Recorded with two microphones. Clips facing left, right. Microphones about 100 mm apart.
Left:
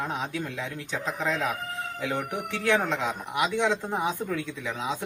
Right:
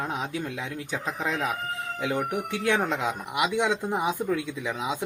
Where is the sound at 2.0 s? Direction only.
15° right (ahead or behind).